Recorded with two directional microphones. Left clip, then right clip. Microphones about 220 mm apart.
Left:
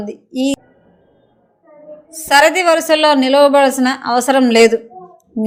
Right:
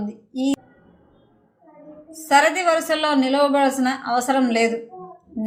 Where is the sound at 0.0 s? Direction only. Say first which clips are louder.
Left 6 dB; 40° left (ahead or behind).